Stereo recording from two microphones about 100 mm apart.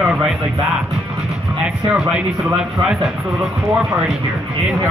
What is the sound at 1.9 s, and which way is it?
Speech, 10° right (ahead or behind).